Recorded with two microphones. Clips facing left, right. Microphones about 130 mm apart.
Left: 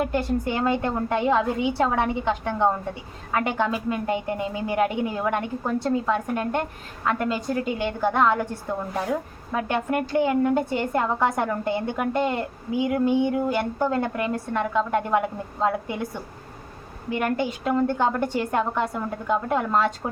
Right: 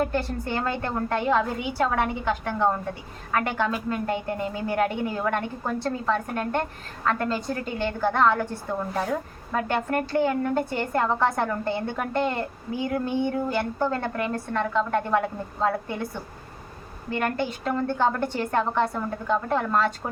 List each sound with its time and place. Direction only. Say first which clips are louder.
0.0 s a woman's voice: left 2 dB; 15° left (ahead or behind)